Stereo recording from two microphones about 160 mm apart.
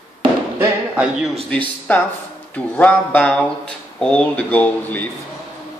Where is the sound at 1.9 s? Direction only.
10° left (ahead or behind).